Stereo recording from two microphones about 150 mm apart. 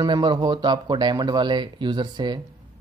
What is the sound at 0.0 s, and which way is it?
Speech, 30° right (ahead or behind).